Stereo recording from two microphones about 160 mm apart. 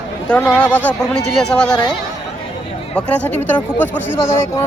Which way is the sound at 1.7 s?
25° left (ahead or behind).